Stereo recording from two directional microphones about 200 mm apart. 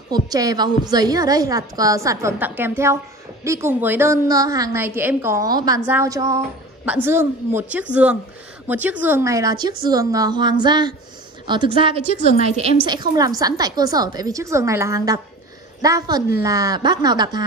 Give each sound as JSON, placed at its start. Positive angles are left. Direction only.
{"t": 0.1, "sound": "a woman's voice", "side_deg": -20}